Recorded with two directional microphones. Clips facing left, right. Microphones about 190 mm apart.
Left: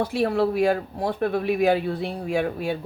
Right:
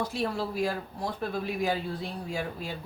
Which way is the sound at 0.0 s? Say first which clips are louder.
Left 9 dB; 65° left (ahead or behind).